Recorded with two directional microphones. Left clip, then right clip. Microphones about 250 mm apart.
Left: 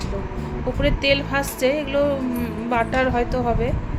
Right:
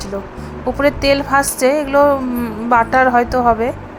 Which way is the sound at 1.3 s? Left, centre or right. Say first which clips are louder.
Right 7 dB; centre.